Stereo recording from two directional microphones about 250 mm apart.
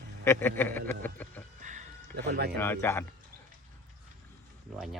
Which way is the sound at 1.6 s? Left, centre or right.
Right.